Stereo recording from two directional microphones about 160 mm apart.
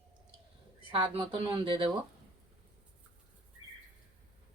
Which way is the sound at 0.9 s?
30° right (ahead or behind).